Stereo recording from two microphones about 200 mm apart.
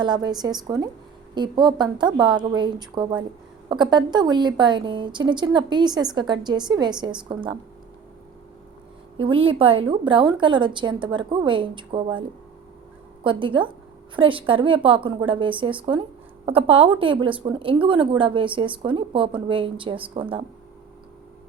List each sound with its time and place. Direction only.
0.0 s a woman's voice: 20° right (ahead or behind)
9.1 s a woman's voice: 25° right (ahead or behind)
13.2 s a woman's voice: 25° right (ahead or behind)